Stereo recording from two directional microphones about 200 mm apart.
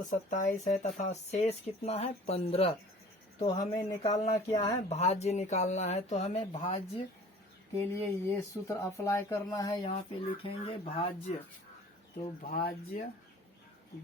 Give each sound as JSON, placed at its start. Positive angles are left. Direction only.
{"t": 0.1, "sound": "speech", "side_deg": 35}
{"t": 4.9, "sound": "speech", "side_deg": 30}
{"t": 7.8, "sound": "speech", "side_deg": 15}
{"t": 9.9, "sound": "speech", "side_deg": 30}
{"t": 12.4, "sound": "speech", "side_deg": 45}